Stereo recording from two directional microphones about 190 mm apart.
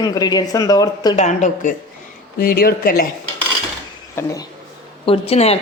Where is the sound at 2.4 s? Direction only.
55° left (ahead or behind).